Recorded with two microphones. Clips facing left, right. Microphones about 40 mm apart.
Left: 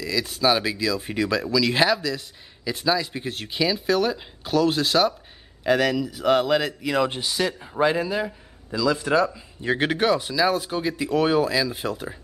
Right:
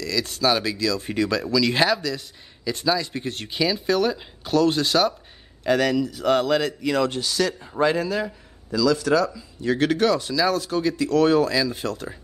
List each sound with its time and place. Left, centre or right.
0.0 s speech: centre
7.1 s speech: centre